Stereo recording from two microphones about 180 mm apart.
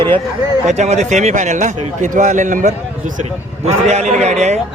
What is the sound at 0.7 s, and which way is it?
A man's voice, 40° right (ahead or behind).